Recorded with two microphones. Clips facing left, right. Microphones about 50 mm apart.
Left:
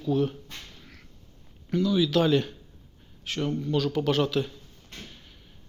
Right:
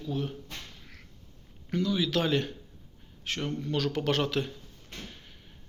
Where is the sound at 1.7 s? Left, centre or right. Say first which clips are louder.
Left 4 dB; right.